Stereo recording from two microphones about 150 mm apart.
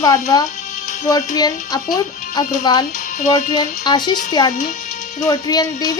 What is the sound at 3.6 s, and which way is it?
Speech, 30° left (ahead or behind).